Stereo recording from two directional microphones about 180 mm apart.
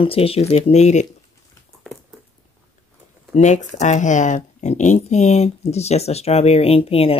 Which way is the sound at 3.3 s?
40° left (ahead or behind).